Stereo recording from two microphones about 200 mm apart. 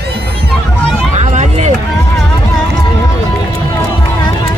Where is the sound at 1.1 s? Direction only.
35° right (ahead or behind).